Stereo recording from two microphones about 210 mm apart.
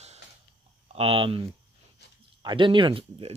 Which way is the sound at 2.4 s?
20° right (ahead or behind).